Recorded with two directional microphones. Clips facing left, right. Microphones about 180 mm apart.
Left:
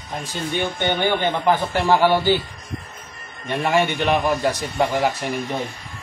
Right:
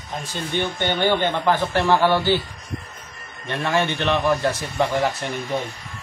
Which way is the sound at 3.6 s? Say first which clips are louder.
Left 2 dB; 15° left (ahead or behind).